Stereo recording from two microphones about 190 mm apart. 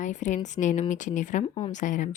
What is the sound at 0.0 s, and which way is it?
A woman's voice, 40° left (ahead or behind).